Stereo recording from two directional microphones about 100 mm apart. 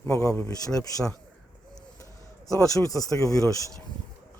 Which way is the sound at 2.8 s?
35° left (ahead or behind).